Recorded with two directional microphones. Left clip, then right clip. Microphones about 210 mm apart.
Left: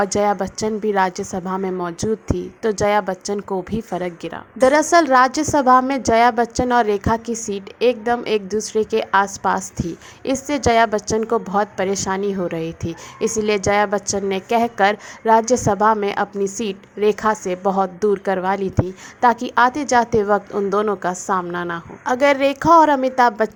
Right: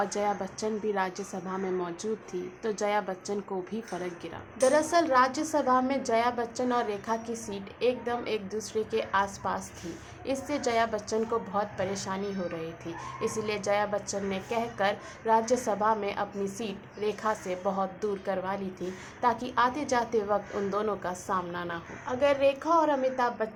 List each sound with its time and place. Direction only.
0.0 s a woman's voice: 40° left (ahead or behind)